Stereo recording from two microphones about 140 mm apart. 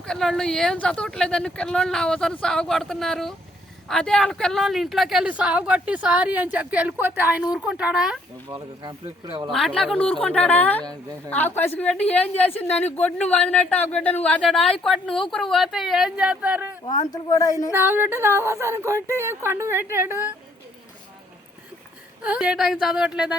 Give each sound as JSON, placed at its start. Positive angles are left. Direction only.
{"t": 0.0, "sound": "speech", "side_deg": 5}
{"t": 8.4, "sound": "speech", "side_deg": -30}
{"t": 9.5, "sound": "a woman's voice", "side_deg": 0}
{"t": 17.1, "sound": "speech", "side_deg": 25}
{"t": 17.7, "sound": "speech", "side_deg": -15}
{"t": 22.2, "sound": "speech", "side_deg": -5}